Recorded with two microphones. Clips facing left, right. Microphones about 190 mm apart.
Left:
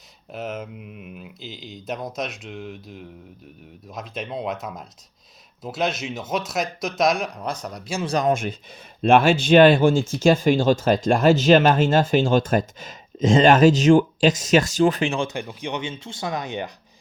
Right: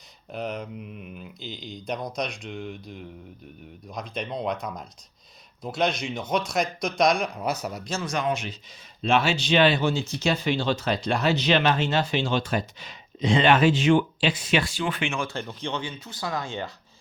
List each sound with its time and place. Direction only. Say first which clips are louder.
0.3 s speech: left 1 dB; centre (ahead or behind)
8.0 s speech: left 7 dB; 35° left (ahead or behind)
8.3 s speech: left 6 dB; 50° left (ahead or behind)
15.3 s speech: left 2 dB; 15° left (ahead or behind)